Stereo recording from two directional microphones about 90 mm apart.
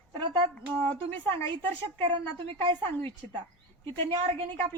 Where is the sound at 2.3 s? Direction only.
80° right.